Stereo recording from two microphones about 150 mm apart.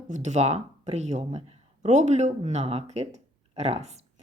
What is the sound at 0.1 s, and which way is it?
Speech, 50° right (ahead or behind).